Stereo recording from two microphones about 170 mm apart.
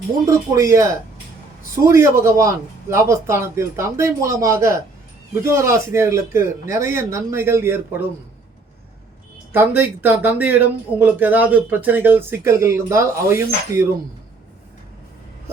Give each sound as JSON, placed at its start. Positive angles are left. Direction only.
{"t": 0.3, "sound": "speech", "side_deg": -20}
{"t": 1.9, "sound": "speech", "side_deg": -15}
{"t": 9.5, "sound": "speech", "side_deg": -10}